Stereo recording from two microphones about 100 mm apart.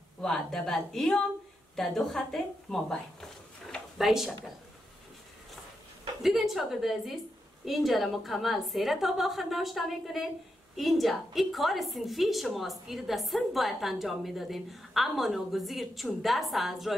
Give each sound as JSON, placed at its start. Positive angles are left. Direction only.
{"t": 0.2, "sound": "a woman's voice", "side_deg": 5}
{"t": 6.2, "sound": "a woman's voice", "side_deg": -5}